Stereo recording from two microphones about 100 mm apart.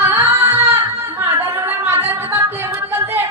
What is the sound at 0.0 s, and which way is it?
Singing, 25° right (ahead or behind).